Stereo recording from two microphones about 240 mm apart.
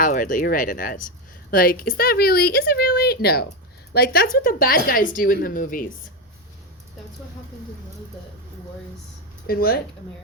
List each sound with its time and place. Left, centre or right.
0.0 s speech: left
9.5 s speech: left